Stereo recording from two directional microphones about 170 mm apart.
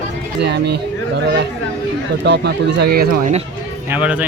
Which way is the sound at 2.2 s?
90° right.